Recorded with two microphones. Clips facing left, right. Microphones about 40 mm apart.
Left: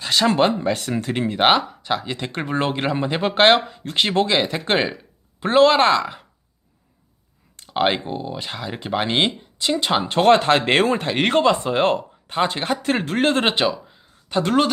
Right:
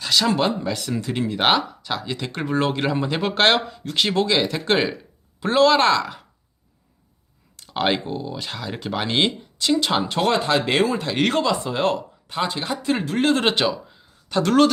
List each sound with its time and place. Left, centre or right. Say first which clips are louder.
0.0 s speech: left 2 dB; left
3.8 s speech: left 1 dB; left
7.6 s speech: left 2 dB; centre
10.0 s speech: left 5 dB; left
11.1 s speech: left 3 dB; left
13.4 s speech: left 1 dB; centre